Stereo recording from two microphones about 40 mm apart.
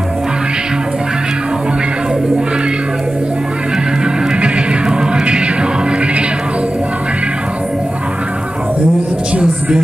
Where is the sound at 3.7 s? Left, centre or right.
Right.